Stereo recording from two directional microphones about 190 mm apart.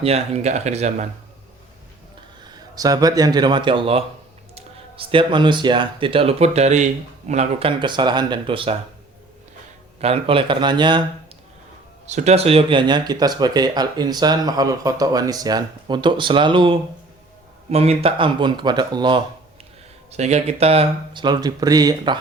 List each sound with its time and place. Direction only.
0.0 s speech: 35° right (ahead or behind)
2.7 s speech: 20° right (ahead or behind)
10.0 s speech: 30° right (ahead or behind)
12.0 s speech: 35° right (ahead or behind)
20.1 s speech: 35° right (ahead or behind)